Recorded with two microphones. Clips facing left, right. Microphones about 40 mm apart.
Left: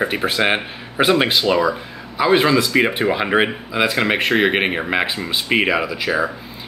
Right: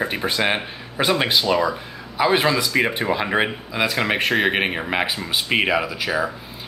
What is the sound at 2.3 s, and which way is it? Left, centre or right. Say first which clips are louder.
Speech: left 6 dB; centre.